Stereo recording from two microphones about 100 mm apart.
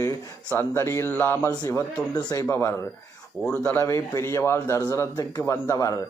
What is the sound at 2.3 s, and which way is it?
A man's voice, 30° left (ahead or behind).